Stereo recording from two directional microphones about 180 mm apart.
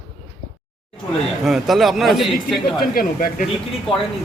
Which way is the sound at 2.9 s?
55° left (ahead or behind).